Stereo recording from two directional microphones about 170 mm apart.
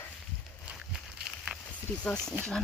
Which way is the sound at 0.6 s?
5° right (ahead or behind).